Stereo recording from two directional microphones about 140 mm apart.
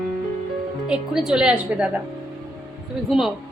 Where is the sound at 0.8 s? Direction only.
5° right (ahead or behind).